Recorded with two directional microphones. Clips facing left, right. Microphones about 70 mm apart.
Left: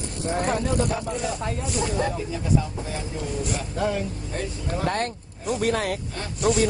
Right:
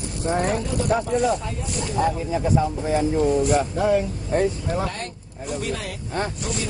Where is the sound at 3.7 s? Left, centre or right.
Centre.